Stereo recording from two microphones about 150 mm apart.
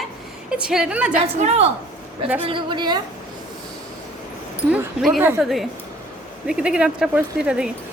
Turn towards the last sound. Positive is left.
turn(degrees=-5)  # may be behind; listen again after turning